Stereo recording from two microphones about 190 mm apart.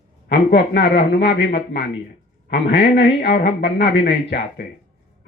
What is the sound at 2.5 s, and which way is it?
Speech, 70° left (ahead or behind).